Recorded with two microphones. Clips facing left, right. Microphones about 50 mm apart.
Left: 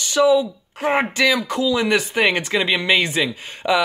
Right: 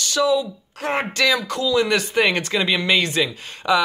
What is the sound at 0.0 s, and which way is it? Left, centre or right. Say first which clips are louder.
Speech: left 4 dB; centre.